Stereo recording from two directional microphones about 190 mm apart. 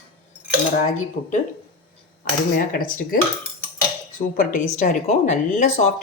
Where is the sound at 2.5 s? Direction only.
45° left (ahead or behind).